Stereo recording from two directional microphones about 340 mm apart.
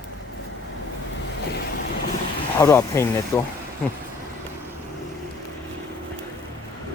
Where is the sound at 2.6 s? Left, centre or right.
Centre.